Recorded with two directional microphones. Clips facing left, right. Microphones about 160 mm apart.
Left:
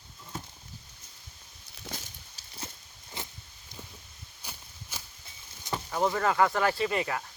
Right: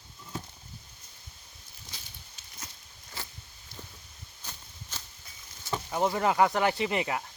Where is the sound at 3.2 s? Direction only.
20° left (ahead or behind).